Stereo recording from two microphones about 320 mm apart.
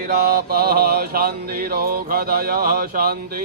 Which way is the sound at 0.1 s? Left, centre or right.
Right.